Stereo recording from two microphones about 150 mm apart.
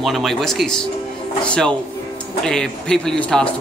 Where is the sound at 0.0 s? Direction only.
Centre (ahead or behind).